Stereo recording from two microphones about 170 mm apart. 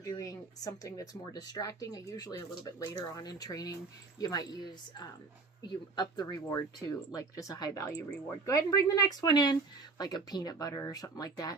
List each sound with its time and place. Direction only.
0.0 s speech: 20° left (ahead or behind)